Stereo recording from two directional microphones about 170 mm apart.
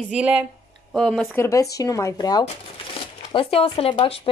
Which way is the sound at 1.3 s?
20° left (ahead or behind).